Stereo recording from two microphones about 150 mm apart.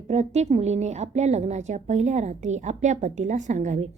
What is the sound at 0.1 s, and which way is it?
A woman's voice, 50° right (ahead or behind).